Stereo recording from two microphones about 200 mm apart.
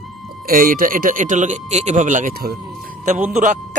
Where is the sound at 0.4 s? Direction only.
45° right (ahead or behind).